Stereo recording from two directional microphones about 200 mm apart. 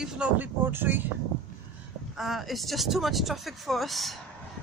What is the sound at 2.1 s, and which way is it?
Speech, centre (ahead or behind).